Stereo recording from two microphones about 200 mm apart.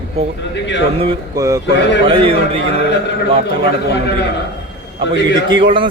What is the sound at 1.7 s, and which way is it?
Speech, 60° left (ahead or behind).